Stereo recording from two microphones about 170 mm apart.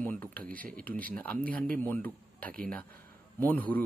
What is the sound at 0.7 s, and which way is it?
Speech, 5° left (ahead or behind).